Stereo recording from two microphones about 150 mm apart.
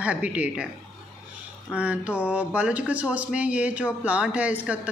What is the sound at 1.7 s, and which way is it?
Speech, 10° right (ahead or behind).